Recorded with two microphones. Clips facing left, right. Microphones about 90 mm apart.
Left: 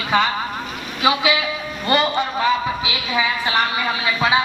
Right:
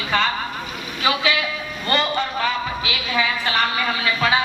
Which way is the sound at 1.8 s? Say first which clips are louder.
Left 3 dB; 15° left (ahead or behind).